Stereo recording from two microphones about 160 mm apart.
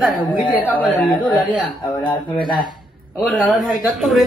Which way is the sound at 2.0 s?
30° left (ahead or behind).